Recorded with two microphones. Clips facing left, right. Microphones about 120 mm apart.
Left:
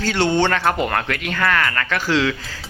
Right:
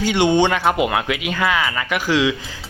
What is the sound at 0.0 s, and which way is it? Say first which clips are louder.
Speech: right 2 dB; 15° right (ahead or behind).